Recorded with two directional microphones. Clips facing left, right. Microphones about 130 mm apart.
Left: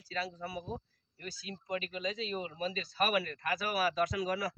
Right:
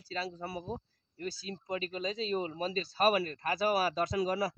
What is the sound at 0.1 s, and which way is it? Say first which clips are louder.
Speech: right 1 dB; 30° right (ahead or behind).